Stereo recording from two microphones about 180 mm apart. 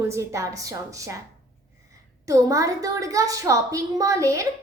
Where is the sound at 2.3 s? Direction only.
20° right (ahead or behind).